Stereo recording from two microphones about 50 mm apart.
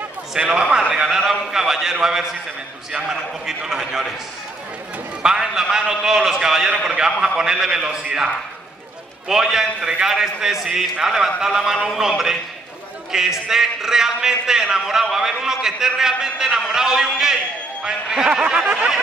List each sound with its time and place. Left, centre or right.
0.4 s a man's voice: centre
5.2 s a man's voice: centre
9.3 s a man's voice: centre